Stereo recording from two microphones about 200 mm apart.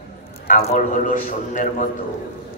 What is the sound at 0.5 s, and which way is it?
A man's voice, 40° left (ahead or behind).